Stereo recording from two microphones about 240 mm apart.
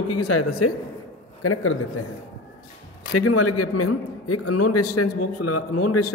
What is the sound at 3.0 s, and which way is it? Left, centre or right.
A man's voice, left.